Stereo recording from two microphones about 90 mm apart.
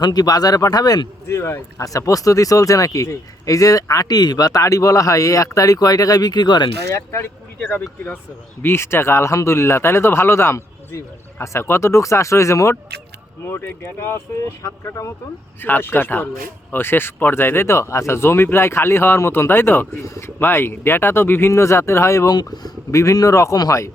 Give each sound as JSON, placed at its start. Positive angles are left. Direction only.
{"t": 0.0, "sound": "speech", "side_deg": 45}
{"t": 1.3, "sound": "speech", "side_deg": 30}
{"t": 7.7, "sound": "speech", "side_deg": 20}
{"t": 15.6, "sound": "speech", "side_deg": 20}
{"t": 22.3, "sound": "speech", "side_deg": 50}
{"t": 22.9, "sound": "speech", "side_deg": 35}